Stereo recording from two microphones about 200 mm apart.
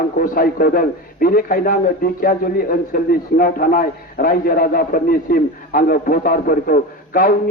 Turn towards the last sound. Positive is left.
turn(degrees=45)  # may be behind; listen again after turning